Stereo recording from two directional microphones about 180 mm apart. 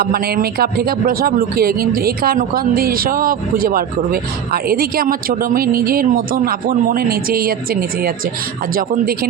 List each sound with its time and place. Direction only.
0.0 s speech: 55° right (ahead or behind)